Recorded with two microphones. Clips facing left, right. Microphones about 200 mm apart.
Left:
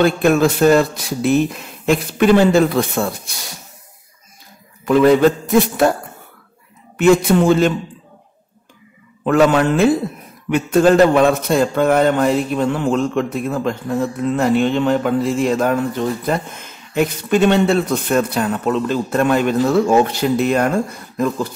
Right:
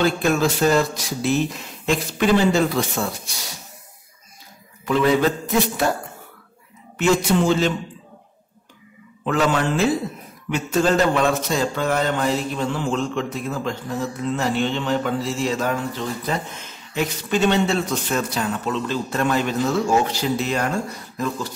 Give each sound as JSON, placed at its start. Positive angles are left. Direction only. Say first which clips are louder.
{"t": 0.0, "sound": "a man's voice", "louder": "left 6 dB", "side_deg": 60}
{"t": 4.8, "sound": "a man's voice", "louder": "left 7 dB", "side_deg": 55}
{"t": 7.0, "sound": "a man's voice", "louder": "left 6 dB", "side_deg": 55}
{"t": 9.2, "sound": "a man's voice", "louder": "left 7 dB", "side_deg": 55}